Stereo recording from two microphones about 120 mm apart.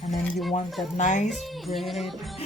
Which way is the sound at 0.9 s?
85° left.